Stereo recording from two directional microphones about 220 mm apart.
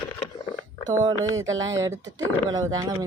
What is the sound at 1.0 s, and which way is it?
A woman's voice, 15° right (ahead or behind).